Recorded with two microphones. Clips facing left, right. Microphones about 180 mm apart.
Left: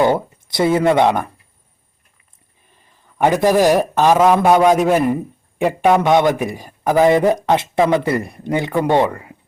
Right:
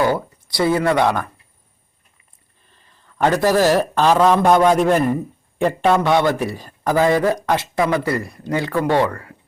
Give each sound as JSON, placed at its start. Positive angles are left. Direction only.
{"t": 0.0, "sound": "speech", "side_deg": 25}
{"t": 2.6, "sound": "a man's voice", "side_deg": 15}